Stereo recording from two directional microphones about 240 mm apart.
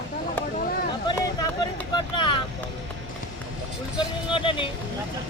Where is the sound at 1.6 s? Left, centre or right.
Centre.